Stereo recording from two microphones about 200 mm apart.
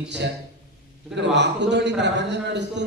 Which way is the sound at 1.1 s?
60° right (ahead or behind).